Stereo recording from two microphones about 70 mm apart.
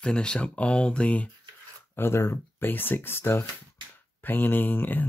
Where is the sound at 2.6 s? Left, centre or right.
Left.